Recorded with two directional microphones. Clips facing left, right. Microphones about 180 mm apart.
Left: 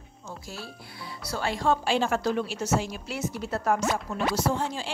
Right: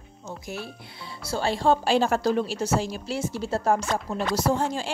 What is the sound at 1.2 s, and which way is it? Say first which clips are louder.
Speech: right 4 dB; 30° right (ahead or behind).